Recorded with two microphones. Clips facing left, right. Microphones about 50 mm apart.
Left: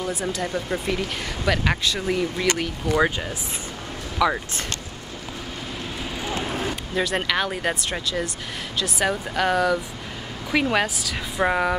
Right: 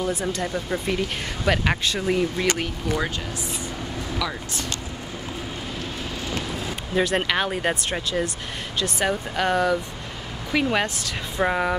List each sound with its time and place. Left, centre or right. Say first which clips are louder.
0.0 s speech: right 1 dB; centre
2.4 s speech: left 1 dB; centre
4.2 s speech: left 11 dB; left
7.0 s speech: right 2 dB; centre